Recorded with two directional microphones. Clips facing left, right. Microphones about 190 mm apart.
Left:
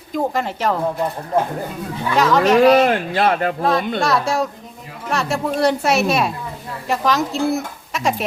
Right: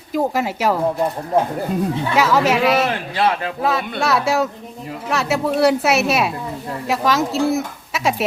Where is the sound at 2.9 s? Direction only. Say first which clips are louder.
Left 2 dB; 50° left (ahead or behind).